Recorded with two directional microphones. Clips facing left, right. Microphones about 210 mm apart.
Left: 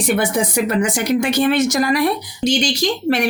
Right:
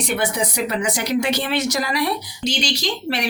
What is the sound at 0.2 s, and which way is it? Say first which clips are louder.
Speech: left 4 dB; 50° left (ahead or behind).